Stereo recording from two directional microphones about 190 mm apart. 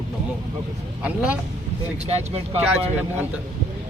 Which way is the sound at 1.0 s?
5° right (ahead or behind).